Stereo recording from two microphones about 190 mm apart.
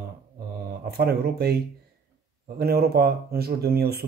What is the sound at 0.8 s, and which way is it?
Speech, 55° right (ahead or behind).